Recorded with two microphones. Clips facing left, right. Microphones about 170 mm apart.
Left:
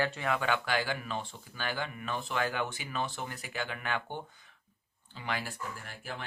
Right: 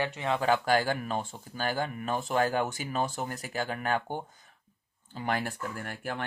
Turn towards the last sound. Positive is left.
turn(degrees=-60)  # may be behind; listen again after turning